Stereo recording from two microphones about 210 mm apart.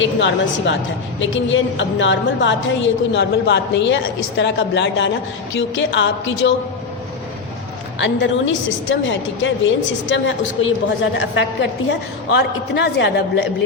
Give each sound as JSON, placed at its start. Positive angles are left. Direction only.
{"t": 0.0, "sound": "a woman's voice", "side_deg": 60}
{"t": 7.9, "sound": "a woman's voice", "side_deg": 60}